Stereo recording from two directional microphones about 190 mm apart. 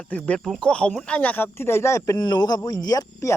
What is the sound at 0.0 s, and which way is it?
Speech, 5° left (ahead or behind).